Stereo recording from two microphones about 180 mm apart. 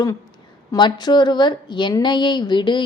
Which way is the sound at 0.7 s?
25° left (ahead or behind).